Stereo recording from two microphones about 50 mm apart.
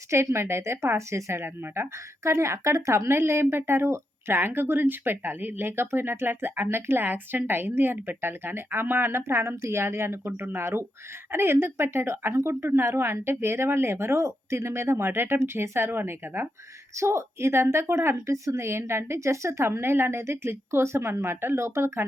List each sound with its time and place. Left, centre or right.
0.1 s a woman's voice: right
0.9 s speech: right
4.4 s speech: right
12.3 s speech: right
16.9 s speech: right